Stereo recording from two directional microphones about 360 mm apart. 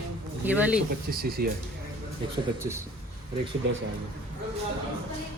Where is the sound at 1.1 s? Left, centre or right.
Right.